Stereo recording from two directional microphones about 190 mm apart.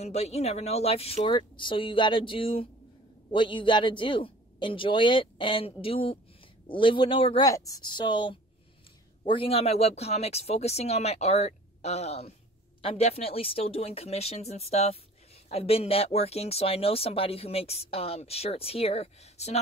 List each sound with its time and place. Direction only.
0.0 s speech: 35° left (ahead or behind)